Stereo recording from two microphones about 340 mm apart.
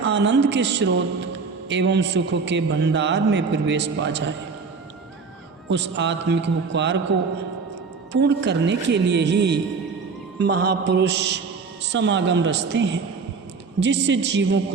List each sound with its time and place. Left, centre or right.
0.0 s a man's voice: right
5.6 s a man's voice: right
8.1 s a man's voice: right